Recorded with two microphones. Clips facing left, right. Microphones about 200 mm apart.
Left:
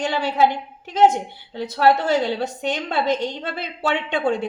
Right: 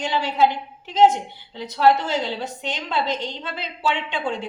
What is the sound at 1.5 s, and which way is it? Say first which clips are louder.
A woman's voice: even; 60° left (ahead or behind).